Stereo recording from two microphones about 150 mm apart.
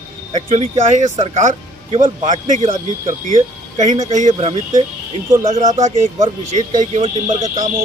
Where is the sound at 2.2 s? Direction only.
55° right (ahead or behind).